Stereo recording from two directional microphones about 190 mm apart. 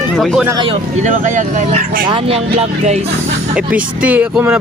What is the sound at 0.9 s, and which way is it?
Speech, 40° right (ahead or behind).